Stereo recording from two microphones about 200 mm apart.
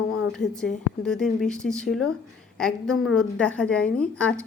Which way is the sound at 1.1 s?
Centre (ahead or behind).